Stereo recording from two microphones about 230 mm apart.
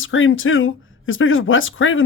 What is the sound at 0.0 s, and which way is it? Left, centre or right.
Speech, left.